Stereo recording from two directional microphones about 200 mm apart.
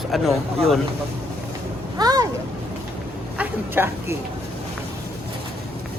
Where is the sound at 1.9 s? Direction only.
20° right (ahead or behind).